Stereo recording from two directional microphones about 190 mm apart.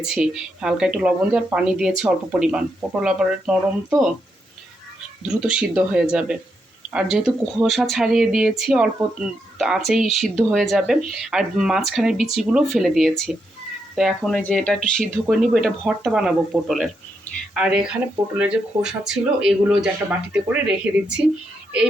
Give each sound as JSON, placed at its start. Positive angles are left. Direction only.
{"t": 0.0, "sound": "speech", "side_deg": -5}
{"t": 5.3, "sound": "speech", "side_deg": -5}